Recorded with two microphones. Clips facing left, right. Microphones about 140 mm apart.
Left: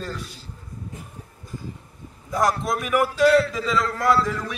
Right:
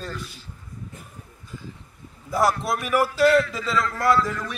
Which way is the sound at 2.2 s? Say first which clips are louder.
Even; 5° right (ahead or behind).